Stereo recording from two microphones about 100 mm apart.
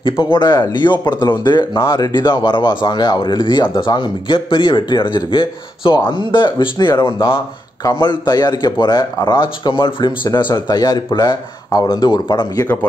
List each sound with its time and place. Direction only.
0.2 s speech: 50° left (ahead or behind)
10.2 s speech: 45° left (ahead or behind)